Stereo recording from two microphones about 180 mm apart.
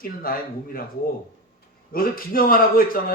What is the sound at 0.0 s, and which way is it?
Speech, 55° left (ahead or behind).